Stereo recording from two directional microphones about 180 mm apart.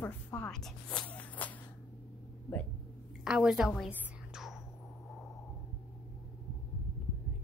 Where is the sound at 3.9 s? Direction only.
5° right (ahead or behind).